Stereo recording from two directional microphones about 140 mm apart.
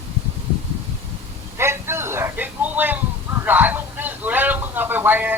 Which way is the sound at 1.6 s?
20° right (ahead or behind).